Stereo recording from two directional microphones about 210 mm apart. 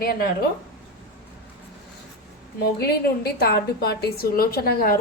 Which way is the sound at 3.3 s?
50° left (ahead or behind).